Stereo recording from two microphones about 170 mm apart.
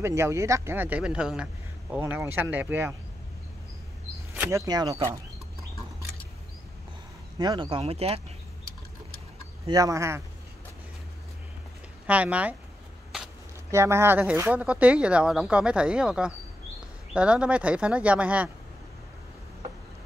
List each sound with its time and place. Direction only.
0.0 s a man's voice: 15° right (ahead or behind)
4.4 s speech: 20° right (ahead or behind)
7.3 s speech: 25° right (ahead or behind)
9.7 s a man's voice: 20° right (ahead or behind)
12.1 s a man's voice: 10° right (ahead or behind)
13.7 s a man's voice: 15° right (ahead or behind)